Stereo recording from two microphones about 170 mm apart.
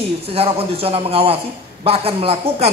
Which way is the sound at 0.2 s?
35° right (ahead or behind).